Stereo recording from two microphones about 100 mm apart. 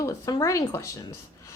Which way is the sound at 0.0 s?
35° left (ahead or behind).